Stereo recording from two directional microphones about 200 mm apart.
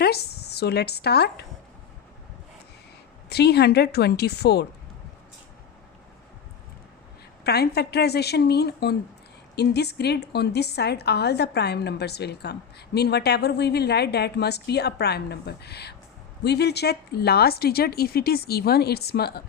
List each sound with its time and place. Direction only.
0.0 s speech: 55° left (ahead or behind)
3.2 s a woman's voice: 55° left (ahead or behind)
7.4 s a woman's voice: 55° left (ahead or behind)